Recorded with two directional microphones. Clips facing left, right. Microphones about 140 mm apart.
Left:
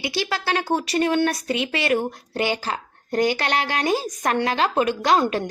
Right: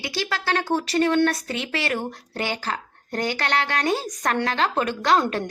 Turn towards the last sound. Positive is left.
turn(degrees=15)  # may be behind; listen again after turning